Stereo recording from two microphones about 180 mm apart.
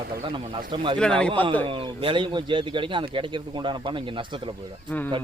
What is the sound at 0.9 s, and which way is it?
Speech, 5° left (ahead or behind).